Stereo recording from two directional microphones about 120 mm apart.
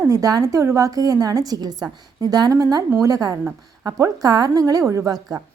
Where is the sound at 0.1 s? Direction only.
30° right (ahead or behind).